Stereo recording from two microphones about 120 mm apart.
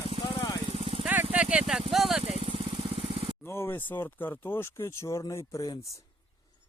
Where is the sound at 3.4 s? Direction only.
20° left (ahead or behind).